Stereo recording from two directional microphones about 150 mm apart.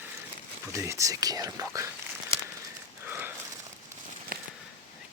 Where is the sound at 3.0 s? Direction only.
10° right (ahead or behind).